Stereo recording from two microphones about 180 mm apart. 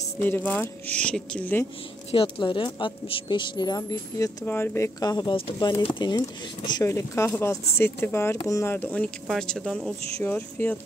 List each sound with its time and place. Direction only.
0.0 s speech: 10° left (ahead or behind)
2.0 s speech: 30° left (ahead or behind); by 10.8 s 10° left (ahead or behind)